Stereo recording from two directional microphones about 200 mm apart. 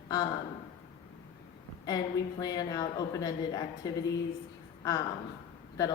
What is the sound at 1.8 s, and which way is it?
A woman's voice, 20° left (ahead or behind).